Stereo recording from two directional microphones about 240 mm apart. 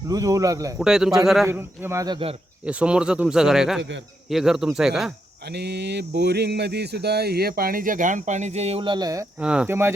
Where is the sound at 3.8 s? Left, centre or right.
Right.